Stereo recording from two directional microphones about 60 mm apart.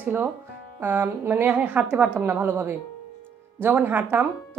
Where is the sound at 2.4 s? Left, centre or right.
Right.